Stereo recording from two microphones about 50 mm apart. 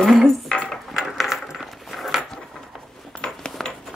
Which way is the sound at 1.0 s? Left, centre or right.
Centre.